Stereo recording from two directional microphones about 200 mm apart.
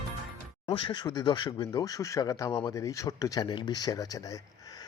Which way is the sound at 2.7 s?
15° left (ahead or behind).